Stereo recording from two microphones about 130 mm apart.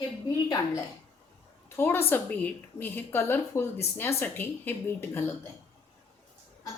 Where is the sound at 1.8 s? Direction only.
20° left (ahead or behind).